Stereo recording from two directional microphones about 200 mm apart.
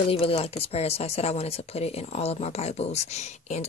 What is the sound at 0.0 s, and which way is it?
Speech, 30° left (ahead or behind).